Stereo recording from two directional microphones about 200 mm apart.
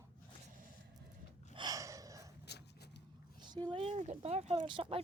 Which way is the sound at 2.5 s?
55° left (ahead or behind).